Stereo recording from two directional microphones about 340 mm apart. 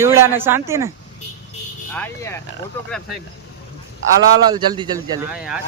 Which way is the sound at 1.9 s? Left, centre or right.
Centre.